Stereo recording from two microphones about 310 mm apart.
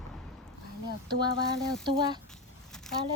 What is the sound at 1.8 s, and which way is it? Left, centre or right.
Speech, centre.